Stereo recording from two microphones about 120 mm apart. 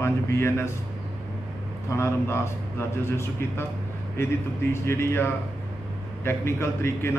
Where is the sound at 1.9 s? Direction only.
20° left (ahead or behind).